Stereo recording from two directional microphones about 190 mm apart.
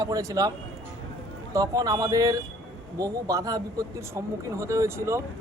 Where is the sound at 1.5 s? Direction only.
20° right (ahead or behind).